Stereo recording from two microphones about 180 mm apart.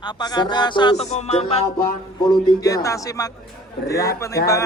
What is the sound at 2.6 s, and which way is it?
A man's voice, 20° left (ahead or behind).